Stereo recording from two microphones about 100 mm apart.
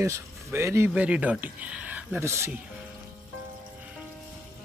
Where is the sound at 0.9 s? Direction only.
10° right (ahead or behind).